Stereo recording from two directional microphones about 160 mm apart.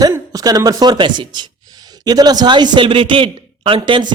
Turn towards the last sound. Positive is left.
turn(degrees=-30)  # may be behind; listen again after turning